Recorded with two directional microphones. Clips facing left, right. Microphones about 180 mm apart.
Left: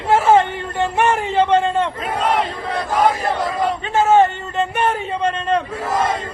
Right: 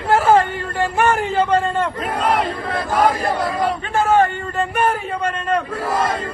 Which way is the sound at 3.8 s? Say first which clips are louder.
Left 3 dB; 25° left (ahead or behind).